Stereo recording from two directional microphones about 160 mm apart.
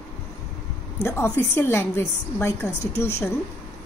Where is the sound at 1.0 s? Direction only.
15° left (ahead or behind).